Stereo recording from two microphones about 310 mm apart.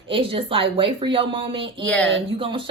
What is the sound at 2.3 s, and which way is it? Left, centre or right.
Speech, centre.